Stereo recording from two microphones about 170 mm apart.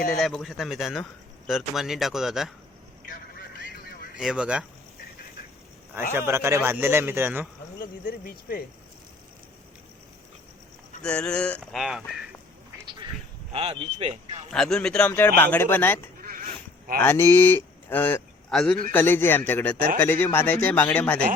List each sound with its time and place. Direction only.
0.2 s a sound: centre (ahead or behind)
4.2 s a sound: 5° right (ahead or behind)
6.1 s a man's voice: 15° right (ahead or behind)
8.0 s speech: 65° left (ahead or behind)
11.0 s a sound: 5° left (ahead or behind)
12.8 s quack: 25° right (ahead or behind)
13.5 s speech: 35° right (ahead or behind)
14.5 s a sound: 5° left (ahead or behind)
15.4 s speech: 10° left (ahead or behind)
16.2 s sheep: 55° right (ahead or behind)
17.0 s speech: 15° left (ahead or behind)
19.7 s speech: 55° right (ahead or behind)
20.0 s speech: 10° left (ahead or behind)